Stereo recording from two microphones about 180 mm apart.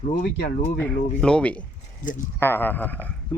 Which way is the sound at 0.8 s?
5° left (ahead or behind).